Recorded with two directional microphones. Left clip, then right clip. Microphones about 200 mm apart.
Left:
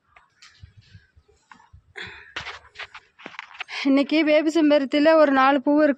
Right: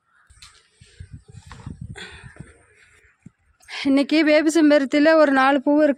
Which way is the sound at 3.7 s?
10° right (ahead or behind).